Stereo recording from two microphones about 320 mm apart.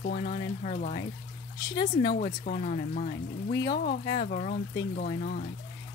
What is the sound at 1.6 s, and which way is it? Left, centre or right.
Speech, centre.